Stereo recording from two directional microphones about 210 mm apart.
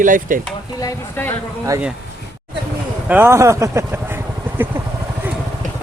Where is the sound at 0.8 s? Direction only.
10° left (ahead or behind).